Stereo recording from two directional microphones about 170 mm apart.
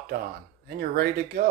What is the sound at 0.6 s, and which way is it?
Speech, 65° right (ahead or behind).